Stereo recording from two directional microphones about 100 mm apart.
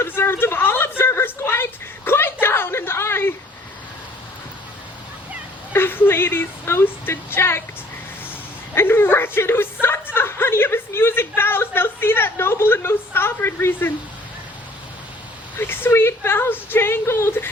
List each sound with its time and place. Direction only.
0.0 s a sound: 25° left (ahead or behind)
5.7 s a woman's voice: 25° left (ahead or behind)
8.7 s a woman's voice: 25° left (ahead or behind)
10.2 s chuckle: 20° left (ahead or behind)
15.5 s a woman's voice: 25° left (ahead or behind)